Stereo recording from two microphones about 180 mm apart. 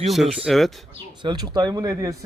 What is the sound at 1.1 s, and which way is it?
Speech, 25° right (ahead or behind).